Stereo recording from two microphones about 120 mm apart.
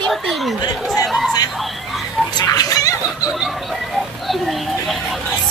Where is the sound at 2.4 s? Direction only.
30° left (ahead or behind).